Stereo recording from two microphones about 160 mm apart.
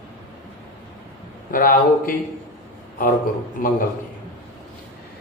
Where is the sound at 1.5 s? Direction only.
60° left (ahead or behind).